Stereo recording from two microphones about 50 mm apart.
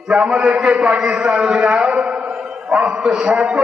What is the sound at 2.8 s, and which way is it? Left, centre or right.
Speech, centre.